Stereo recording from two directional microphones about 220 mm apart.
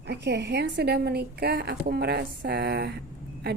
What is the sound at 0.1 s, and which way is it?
A woman's voice, 50° right (ahead or behind).